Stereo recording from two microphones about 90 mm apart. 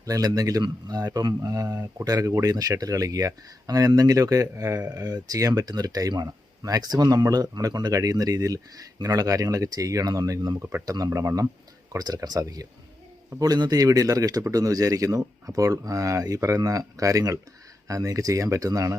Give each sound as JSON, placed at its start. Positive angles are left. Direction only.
{"t": 0.0, "sound": "speech", "side_deg": -40}
{"t": 11.9, "sound": "speech", "side_deg": -45}